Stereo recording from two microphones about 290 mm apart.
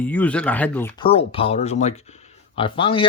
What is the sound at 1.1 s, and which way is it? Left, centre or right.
Speech, centre.